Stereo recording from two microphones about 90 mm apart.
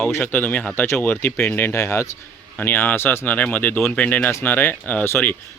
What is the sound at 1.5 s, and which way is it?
Speech, 25° left (ahead or behind).